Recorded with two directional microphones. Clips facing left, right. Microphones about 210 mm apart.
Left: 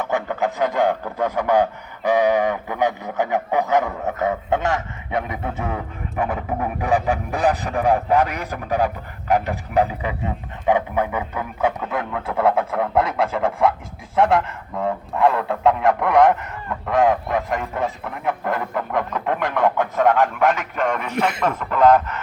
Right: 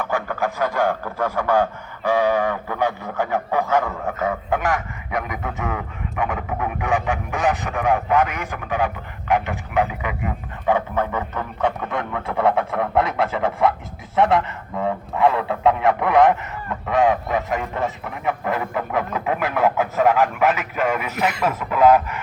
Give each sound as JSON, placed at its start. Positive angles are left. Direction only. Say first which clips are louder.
{"t": 0.0, "sound": "speech", "louder": "left 1 dB", "side_deg": 20}
{"t": 10.7, "sound": "speech", "louder": "left 1 dB", "side_deg": 15}